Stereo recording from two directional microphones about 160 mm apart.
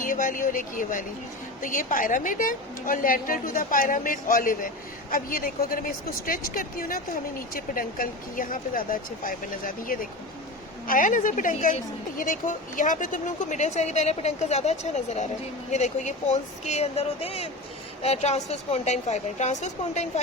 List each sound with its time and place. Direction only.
0.0 s a woman's voice: 55° left (ahead or behind)